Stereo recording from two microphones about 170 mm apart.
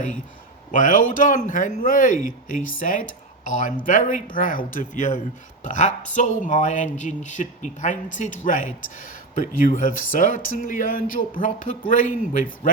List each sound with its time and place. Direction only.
0.7 s speech: 50° left (ahead or behind)